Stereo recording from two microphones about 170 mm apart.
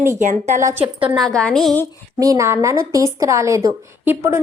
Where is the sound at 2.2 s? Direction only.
20° right (ahead or behind).